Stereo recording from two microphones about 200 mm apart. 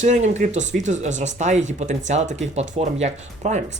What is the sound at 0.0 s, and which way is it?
Speech, 35° right (ahead or behind).